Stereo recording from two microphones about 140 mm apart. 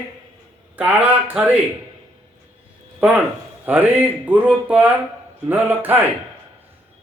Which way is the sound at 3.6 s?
10° right (ahead or behind).